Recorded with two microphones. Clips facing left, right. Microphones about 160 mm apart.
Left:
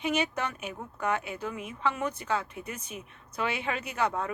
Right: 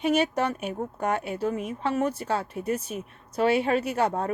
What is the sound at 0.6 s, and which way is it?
Speech, 50° right (ahead or behind).